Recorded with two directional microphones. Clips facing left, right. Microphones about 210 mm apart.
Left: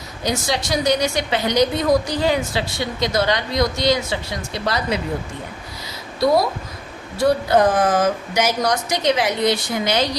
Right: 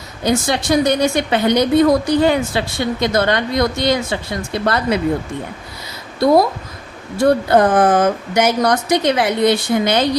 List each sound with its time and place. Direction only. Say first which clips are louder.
0.3 s a woman's voice: right 6 dB; 55° right (ahead or behind)
7.2 s a woman's voice: right 3 dB; 55° right (ahead or behind)